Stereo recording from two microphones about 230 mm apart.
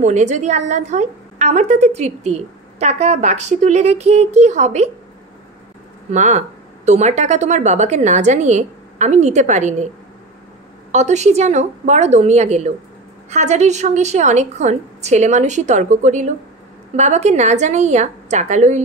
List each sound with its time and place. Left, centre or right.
0.0 s a woman's voice: right
6.1 s a woman's voice: right
10.9 s a woman's voice: right